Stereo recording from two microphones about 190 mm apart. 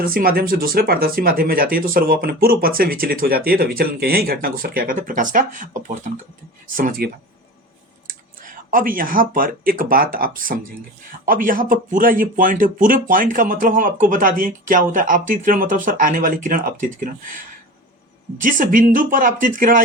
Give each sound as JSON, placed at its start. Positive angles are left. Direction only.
{"t": 0.0, "sound": "speech", "side_deg": -50}
{"t": 18.3, "sound": "speech", "side_deg": -45}